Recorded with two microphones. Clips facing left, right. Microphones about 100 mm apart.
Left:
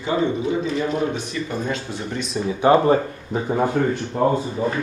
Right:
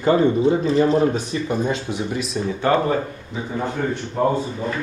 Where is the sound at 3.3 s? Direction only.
45° left (ahead or behind).